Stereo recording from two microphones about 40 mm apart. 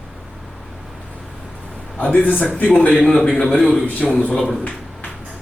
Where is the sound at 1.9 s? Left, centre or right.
Left.